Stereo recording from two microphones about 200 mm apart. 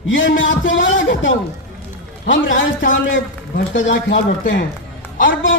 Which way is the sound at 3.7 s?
65° left (ahead or behind).